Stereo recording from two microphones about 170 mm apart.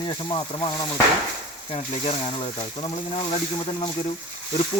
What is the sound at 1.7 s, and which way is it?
Speech, 35° left (ahead or behind).